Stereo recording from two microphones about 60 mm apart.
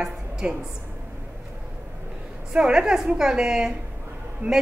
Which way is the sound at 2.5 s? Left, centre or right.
Centre.